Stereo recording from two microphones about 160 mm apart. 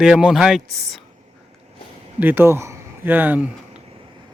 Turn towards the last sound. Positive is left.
turn(degrees=-10)  # may be behind; listen again after turning